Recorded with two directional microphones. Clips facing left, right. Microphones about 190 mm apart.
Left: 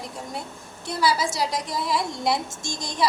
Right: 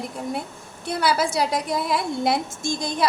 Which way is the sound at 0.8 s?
60° right (ahead or behind).